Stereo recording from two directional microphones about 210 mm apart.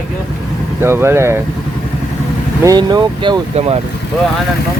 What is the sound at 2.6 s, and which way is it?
Speech, 20° right (ahead or behind).